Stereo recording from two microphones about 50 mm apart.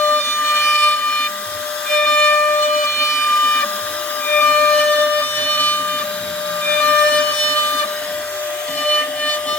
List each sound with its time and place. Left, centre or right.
0.0 s siren: left
1.9 s music: left
3.4 s printer: left
4.3 s siren: left
6.7 s a sound: left
8.8 s a sound: left